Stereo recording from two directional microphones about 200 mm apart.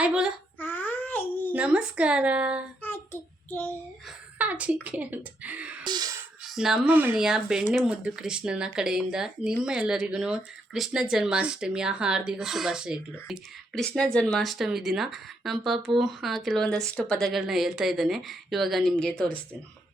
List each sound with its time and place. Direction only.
0.0 s speech: 5° right (ahead or behind)
0.6 s a sound: 10° left (ahead or behind)
1.5 s speech: 5° right (ahead or behind)
2.8 s child singing: 10° left (ahead or behind)
4.4 s speech: 5° right (ahead or behind)
5.8 s music: 20° right (ahead or behind)
6.4 s speech: centre (ahead or behind)